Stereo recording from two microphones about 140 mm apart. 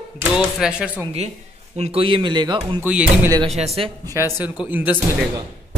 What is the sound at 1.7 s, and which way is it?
Speech, 45° right (ahead or behind).